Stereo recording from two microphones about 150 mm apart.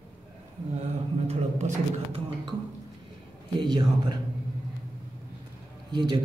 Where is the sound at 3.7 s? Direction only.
30° right (ahead or behind).